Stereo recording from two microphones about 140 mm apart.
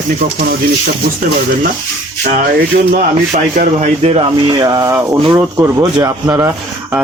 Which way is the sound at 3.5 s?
65° right (ahead or behind).